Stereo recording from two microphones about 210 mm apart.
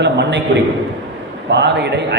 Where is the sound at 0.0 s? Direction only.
55° right (ahead or behind).